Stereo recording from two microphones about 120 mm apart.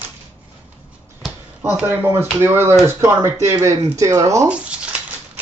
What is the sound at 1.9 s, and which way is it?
Speech, 20° right (ahead or behind).